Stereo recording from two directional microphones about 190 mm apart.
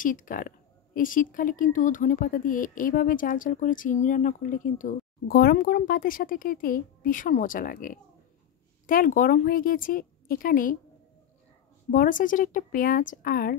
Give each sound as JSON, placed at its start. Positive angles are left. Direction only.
{"t": 0.0, "sound": "speech", "side_deg": 45}
{"t": 11.9, "sound": "speech", "side_deg": 45}